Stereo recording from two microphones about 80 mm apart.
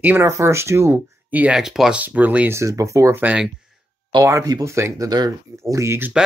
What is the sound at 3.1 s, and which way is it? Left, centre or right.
Speech, centre.